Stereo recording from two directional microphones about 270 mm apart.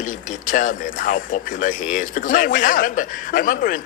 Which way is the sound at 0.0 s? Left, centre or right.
Left.